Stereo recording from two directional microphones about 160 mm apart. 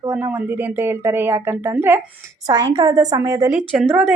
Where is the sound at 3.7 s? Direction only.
5° right (ahead or behind).